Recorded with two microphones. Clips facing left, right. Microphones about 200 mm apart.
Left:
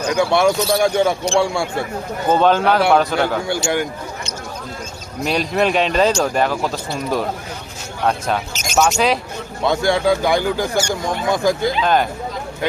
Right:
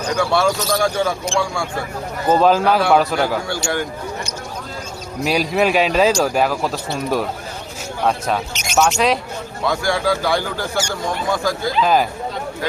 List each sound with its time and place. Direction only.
0.2 s speech: 20° left (ahead or behind)
2.3 s speech: centre (ahead or behind)
3.5 s speech: 20° left (ahead or behind)
5.2 s speech: 5° right (ahead or behind)
8.7 s speech: centre (ahead or behind)
9.6 s speech: 20° left (ahead or behind)
11.8 s speech: 5° right (ahead or behind)